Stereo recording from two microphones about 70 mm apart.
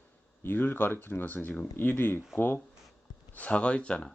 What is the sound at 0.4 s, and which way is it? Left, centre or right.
Speech, left.